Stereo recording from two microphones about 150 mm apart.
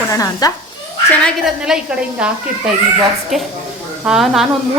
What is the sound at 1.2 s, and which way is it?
Speech, 5° right (ahead or behind).